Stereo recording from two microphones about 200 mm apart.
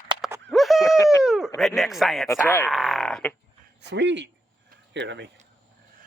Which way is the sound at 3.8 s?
60° right (ahead or behind).